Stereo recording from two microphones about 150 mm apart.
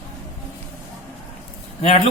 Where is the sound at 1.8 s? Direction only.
45° left (ahead or behind).